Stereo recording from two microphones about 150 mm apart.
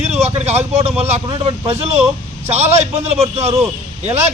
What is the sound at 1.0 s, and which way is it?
Speech, 35° right (ahead or behind).